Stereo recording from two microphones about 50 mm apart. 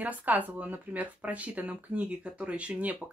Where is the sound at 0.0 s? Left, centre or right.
Right.